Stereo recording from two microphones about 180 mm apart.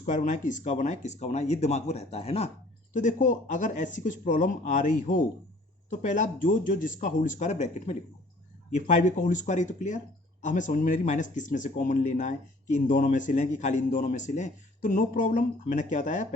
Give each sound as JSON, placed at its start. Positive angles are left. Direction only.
{"t": 0.0, "sound": "speech", "side_deg": 45}